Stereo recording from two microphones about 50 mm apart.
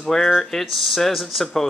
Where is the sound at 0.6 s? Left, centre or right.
Centre.